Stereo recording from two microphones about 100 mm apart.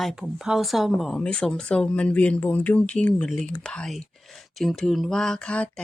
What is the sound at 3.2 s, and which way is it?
Speech, 5° left (ahead or behind).